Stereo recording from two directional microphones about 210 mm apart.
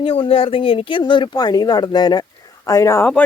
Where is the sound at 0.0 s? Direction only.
25° left (ahead or behind).